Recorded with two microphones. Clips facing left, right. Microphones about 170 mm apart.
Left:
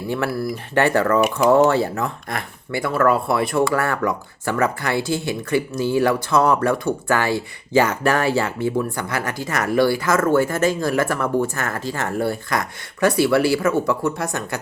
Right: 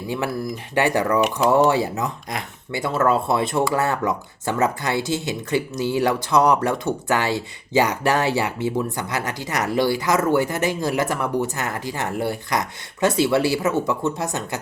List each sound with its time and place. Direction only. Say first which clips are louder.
0.5 s speech: left 2 dB; 15° right (ahead or behind)